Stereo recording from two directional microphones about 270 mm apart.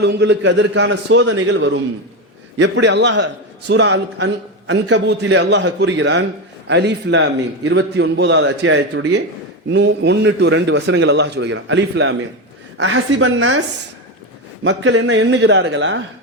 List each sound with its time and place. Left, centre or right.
0.0 s a man's voice: right